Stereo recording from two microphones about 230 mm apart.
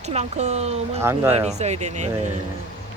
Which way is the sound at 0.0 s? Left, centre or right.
Right.